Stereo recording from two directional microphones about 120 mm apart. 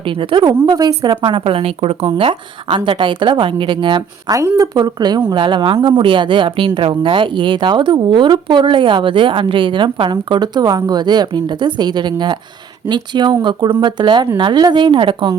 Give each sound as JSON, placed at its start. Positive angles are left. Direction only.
{"t": 0.0, "sound": "a woman's voice", "side_deg": -45}
{"t": 4.3, "sound": "a woman's voice", "side_deg": -25}